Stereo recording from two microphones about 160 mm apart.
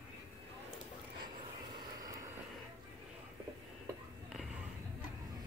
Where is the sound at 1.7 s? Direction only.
25° right (ahead or behind).